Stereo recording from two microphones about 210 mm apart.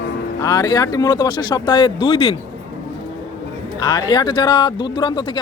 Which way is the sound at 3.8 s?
20° left (ahead or behind).